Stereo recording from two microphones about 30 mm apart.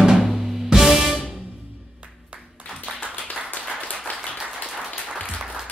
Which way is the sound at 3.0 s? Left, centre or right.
Left.